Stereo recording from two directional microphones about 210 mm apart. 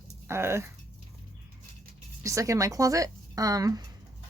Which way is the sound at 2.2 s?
15° right (ahead or behind).